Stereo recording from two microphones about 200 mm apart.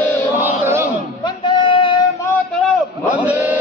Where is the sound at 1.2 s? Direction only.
25° left (ahead or behind).